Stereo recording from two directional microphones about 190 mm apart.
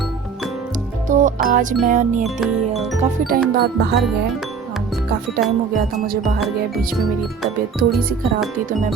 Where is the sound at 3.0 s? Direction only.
50° right (ahead or behind).